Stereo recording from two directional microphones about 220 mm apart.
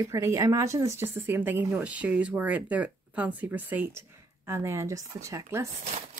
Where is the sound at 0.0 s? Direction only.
15° right (ahead or behind).